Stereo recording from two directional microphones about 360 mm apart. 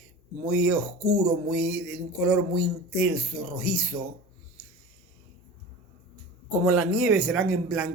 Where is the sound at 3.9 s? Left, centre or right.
Centre.